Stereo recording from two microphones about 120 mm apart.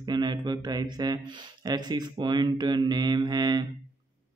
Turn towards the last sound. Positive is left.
turn(degrees=-35)  # may be behind; listen again after turning